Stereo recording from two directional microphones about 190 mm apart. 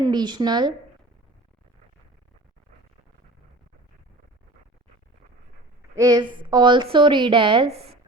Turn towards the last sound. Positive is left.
turn(degrees=-30)  # may be behind; listen again after turning